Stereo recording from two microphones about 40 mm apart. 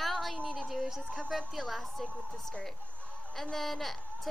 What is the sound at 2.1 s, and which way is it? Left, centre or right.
Speech, left.